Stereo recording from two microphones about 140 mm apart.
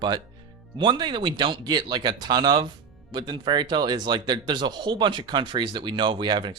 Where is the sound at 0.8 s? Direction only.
35° right (ahead or behind).